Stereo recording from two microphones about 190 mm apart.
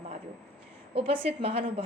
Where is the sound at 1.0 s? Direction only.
30° right (ahead or behind).